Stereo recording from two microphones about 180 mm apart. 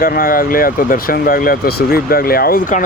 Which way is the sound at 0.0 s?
50° left (ahead or behind).